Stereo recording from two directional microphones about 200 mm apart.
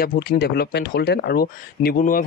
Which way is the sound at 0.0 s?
50° left (ahead or behind).